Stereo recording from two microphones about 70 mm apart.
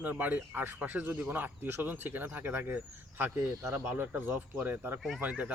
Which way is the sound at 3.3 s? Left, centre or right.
Right.